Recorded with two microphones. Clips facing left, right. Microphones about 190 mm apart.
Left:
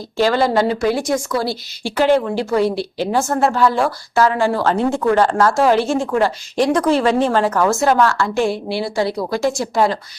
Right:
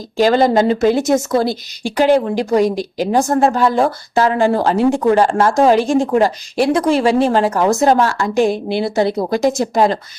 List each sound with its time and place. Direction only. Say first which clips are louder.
0.2 s a woman's voice: right 3 dB; 20° right (ahead or behind)